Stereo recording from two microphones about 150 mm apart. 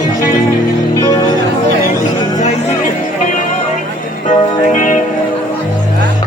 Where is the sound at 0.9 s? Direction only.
25° left (ahead or behind).